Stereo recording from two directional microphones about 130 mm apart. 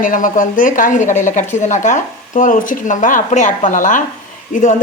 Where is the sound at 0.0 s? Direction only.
90° left.